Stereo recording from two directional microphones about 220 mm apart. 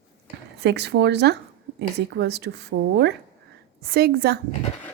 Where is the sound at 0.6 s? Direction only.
50° right (ahead or behind).